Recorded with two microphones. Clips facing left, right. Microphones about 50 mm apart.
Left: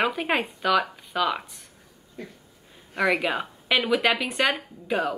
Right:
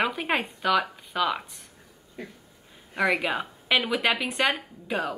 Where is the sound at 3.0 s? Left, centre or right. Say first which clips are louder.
Left 1 dB; centre.